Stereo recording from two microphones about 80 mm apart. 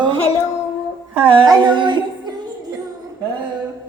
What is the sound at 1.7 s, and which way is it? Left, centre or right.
Music, right.